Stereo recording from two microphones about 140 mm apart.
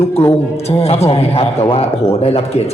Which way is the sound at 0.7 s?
45° left (ahead or behind).